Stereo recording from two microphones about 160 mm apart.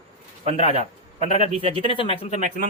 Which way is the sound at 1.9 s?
35° left (ahead or behind).